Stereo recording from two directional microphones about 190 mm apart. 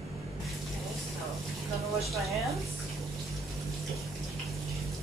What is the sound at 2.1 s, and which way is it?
Speech, centre (ahead or behind).